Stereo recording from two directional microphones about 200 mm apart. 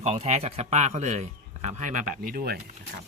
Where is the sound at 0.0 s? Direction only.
35° right (ahead or behind).